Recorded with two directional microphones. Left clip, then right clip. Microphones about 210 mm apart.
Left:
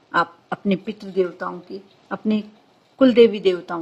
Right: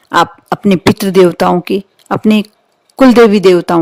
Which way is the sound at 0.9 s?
50° right (ahead or behind).